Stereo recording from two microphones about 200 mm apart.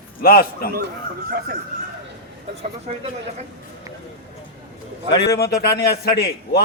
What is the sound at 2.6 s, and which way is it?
Speech, 30° right (ahead or behind).